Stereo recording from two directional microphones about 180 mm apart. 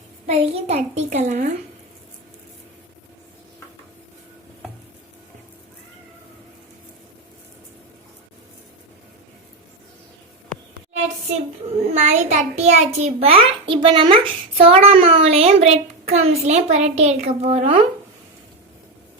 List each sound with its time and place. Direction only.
0.3 s a child's voice: 35° right (ahead or behind)
10.5 s a sound: 40° right (ahead or behind)
11.9 s a child's voice: 40° right (ahead or behind)